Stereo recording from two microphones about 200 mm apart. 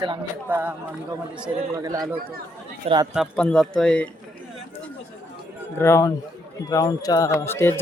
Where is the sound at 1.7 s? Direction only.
15° right (ahead or behind).